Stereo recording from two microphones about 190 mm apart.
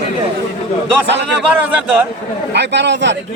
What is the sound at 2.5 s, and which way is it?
Speech, 65° right (ahead or behind).